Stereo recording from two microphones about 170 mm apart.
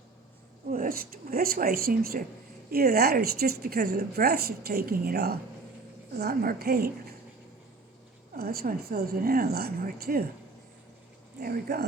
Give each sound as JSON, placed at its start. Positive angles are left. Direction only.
{"t": 0.7, "sound": "a woman's voice", "side_deg": -55}
{"t": 8.4, "sound": "a woman's voice", "side_deg": -60}
{"t": 11.3, "sound": "a woman's voice", "side_deg": -65}